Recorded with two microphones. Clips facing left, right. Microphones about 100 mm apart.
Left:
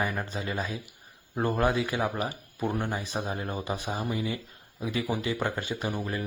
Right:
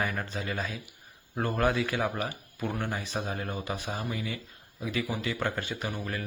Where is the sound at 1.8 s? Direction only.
15° left (ahead or behind).